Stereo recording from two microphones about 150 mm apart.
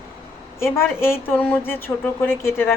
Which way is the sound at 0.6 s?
15° left (ahead or behind).